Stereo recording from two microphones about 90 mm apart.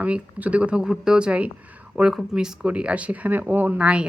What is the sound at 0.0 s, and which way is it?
A woman's voice, 15° right (ahead or behind).